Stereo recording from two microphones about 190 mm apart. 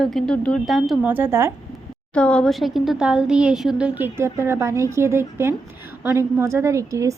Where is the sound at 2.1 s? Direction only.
5° left (ahead or behind).